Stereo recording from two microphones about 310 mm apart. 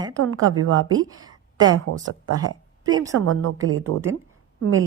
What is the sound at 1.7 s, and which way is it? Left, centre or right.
Speech, right.